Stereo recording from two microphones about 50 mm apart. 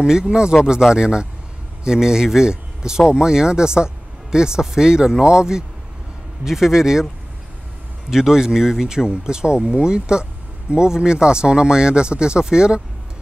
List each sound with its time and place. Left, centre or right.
0.0 s speech: centre
8.1 s speech: centre